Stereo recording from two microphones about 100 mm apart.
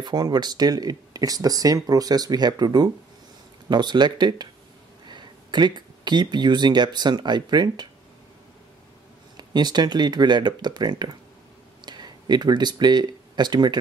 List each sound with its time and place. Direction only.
0.0 s speech: 45° right (ahead or behind)
9.4 s speech: 45° right (ahead or behind)